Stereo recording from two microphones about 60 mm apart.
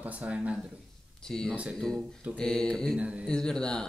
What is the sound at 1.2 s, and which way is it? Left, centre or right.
Speech, centre.